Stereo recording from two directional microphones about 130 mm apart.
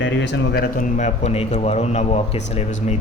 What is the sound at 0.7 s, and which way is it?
A man's voice, 80° left.